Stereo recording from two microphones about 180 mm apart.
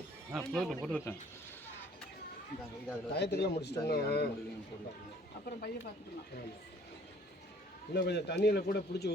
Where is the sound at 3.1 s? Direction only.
70° left (ahead or behind).